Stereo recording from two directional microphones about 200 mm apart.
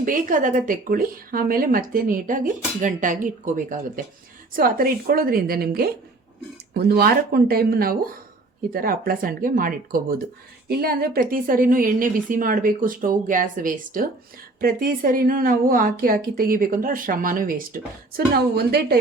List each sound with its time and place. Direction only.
0.0 s speech: 40° right (ahead or behind)